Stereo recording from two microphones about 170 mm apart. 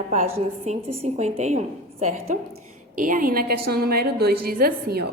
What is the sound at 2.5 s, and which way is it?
A woman's voice, 55° right (ahead or behind).